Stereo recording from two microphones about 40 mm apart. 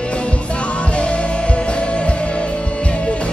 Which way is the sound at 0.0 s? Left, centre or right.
Left.